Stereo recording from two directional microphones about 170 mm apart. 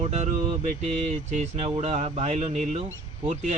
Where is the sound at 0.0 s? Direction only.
40° right (ahead or behind).